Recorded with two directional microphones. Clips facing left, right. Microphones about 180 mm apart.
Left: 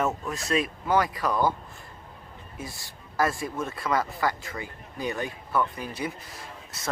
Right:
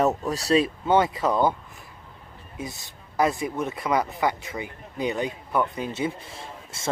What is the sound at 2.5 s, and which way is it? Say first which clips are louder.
Speech: right 4 dB; 20° right (ahead or behind).